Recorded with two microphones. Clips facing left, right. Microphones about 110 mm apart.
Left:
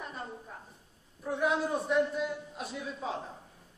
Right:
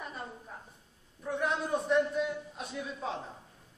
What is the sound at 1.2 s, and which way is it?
A man's voice, 5° left (ahead or behind).